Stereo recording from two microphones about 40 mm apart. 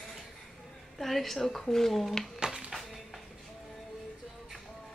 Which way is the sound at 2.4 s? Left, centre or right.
Right.